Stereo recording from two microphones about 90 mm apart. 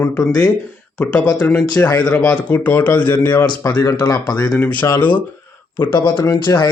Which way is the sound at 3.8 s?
35° left (ahead or behind).